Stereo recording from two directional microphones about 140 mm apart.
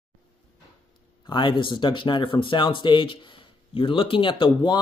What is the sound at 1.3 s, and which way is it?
Speech, 35° left (ahead or behind).